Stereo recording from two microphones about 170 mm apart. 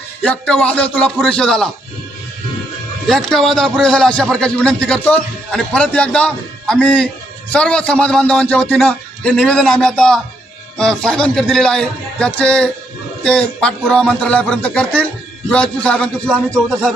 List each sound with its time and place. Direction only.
0.2 s a man's voice: 5° left (ahead or behind)
3.1 s a man's voice: centre (ahead or behind)